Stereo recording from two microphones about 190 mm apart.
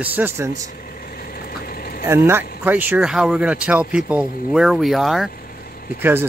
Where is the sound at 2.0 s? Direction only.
15° right (ahead or behind).